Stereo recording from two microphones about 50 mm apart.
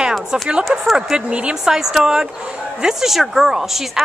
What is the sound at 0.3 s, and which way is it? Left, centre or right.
A woman's voice, centre.